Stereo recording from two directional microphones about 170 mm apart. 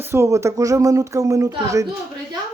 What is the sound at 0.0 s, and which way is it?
Speech, 15° right (ahead or behind).